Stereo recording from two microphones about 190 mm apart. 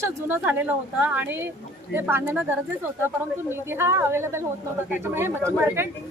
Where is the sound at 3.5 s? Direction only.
15° right (ahead or behind).